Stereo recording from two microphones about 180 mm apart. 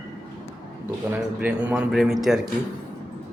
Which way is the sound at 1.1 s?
5° right (ahead or behind).